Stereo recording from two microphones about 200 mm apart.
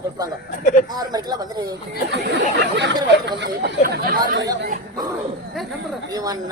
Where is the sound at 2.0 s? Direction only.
60° right (ahead or behind).